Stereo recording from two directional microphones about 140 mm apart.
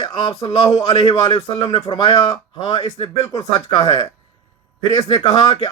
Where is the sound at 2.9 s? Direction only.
45° left (ahead or behind).